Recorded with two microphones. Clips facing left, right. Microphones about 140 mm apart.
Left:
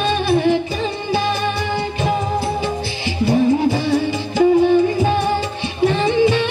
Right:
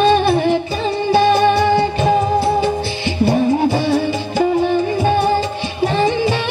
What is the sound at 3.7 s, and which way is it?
Music, 30° right (ahead or behind).